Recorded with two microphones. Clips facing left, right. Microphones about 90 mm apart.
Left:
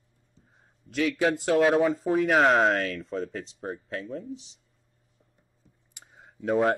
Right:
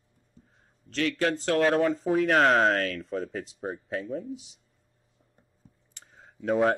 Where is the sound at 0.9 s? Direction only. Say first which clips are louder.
Left 2 dB; 5° left (ahead or behind).